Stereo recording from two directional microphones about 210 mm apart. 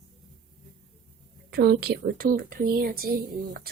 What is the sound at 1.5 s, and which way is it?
Speech, 50° right (ahead or behind).